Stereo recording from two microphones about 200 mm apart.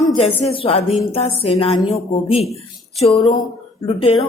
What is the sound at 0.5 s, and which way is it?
A woman's voice, 30° left (ahead or behind).